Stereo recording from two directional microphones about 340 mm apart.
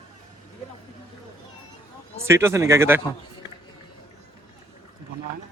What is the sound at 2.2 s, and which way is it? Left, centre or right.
Speech, centre.